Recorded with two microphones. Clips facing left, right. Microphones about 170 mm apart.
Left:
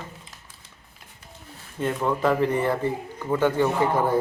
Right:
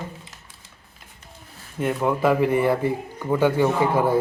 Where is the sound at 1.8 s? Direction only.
10° right (ahead or behind).